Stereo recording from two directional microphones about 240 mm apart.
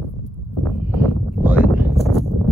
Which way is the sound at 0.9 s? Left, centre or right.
Centre.